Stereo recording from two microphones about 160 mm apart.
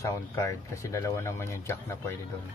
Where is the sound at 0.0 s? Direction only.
20° left (ahead or behind).